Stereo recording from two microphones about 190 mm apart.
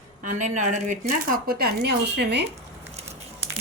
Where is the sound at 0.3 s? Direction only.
40° right (ahead or behind); by 2.4 s 60° right (ahead or behind).